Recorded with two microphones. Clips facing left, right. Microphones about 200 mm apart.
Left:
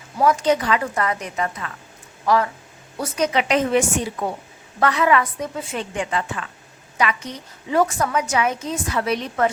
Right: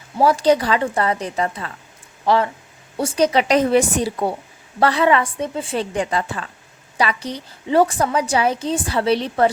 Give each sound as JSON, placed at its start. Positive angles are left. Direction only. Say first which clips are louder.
{"t": 0.2, "sound": "a woman's voice", "louder": "right 3 dB", "side_deg": -35}